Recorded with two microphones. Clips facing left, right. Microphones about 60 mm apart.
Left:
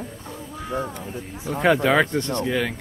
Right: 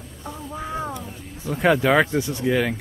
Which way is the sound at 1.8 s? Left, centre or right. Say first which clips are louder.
Right 1 dB; centre.